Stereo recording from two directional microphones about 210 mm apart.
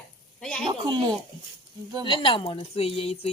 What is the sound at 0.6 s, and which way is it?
Speech, 20° right (ahead or behind).